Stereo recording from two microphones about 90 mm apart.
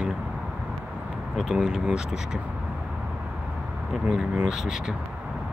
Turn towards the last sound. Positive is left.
turn(degrees=-5)  # may be behind; listen again after turning